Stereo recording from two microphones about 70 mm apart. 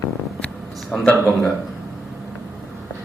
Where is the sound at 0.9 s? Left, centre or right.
Centre.